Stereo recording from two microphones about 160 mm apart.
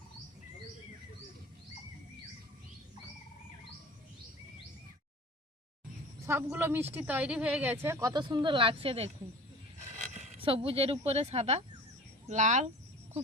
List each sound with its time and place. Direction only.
6.2 s speech: 15° right (ahead or behind); by 9.0 s 35° right (ahead or behind)
10.2 s speech: 35° right (ahead or behind)